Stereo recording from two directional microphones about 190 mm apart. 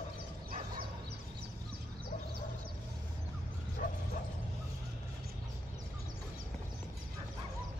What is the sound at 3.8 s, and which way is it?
Bow-wow, 45° left (ahead or behind).